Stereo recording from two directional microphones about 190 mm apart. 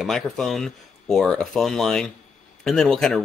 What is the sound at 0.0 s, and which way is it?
Speech, centre (ahead or behind).